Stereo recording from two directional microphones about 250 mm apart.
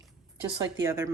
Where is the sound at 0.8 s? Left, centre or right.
Centre.